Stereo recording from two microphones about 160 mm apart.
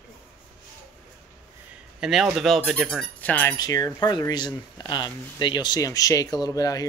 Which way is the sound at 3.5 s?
25° left (ahead or behind).